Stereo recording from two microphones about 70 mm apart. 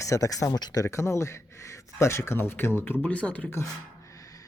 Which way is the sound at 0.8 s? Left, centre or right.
Left.